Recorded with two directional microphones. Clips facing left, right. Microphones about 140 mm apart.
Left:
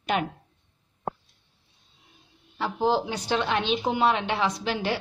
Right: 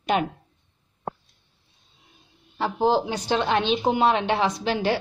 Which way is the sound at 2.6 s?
25° right (ahead or behind).